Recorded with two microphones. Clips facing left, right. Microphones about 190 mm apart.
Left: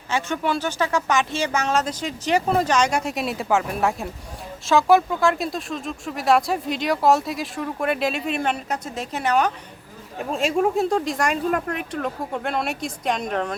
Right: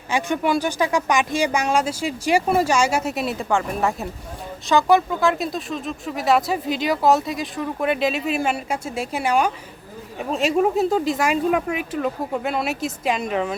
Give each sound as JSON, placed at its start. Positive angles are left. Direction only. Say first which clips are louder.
{"t": 0.1, "sound": "speech", "louder": "right 3 dB", "side_deg": -15}